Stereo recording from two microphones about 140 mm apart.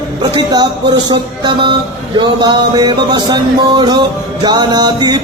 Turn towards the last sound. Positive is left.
turn(degrees=-30)  # may be behind; listen again after turning